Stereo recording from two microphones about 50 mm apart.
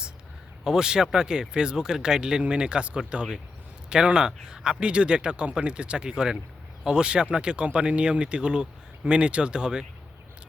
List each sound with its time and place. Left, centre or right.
0.6 s speech: centre